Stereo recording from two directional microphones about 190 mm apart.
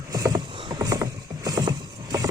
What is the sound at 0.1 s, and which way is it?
Vehicle, 20° right (ahead or behind).